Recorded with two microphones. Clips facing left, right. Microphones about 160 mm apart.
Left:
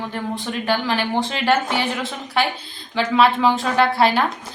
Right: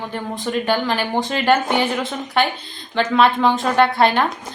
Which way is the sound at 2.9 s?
5° left (ahead or behind).